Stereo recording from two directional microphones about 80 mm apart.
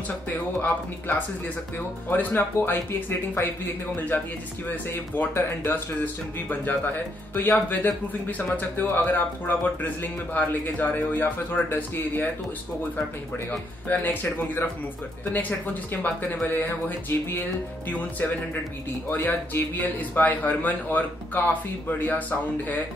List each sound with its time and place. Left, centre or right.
0.6 s speech: left
13.5 s speech: left